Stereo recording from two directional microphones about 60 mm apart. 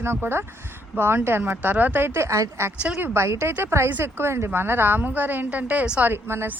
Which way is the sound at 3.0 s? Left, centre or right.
Right.